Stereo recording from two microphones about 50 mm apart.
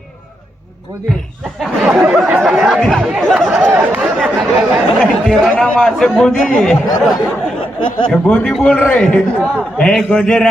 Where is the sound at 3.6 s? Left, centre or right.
Right.